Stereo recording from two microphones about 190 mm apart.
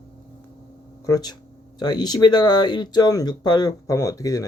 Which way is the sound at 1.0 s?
20° left (ahead or behind).